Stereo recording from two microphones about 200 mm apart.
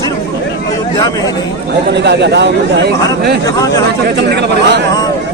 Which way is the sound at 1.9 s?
60° right (ahead or behind).